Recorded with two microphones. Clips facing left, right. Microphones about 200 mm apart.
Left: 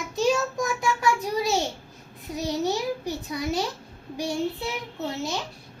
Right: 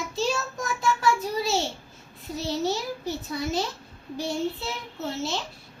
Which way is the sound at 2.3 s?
15° left (ahead or behind).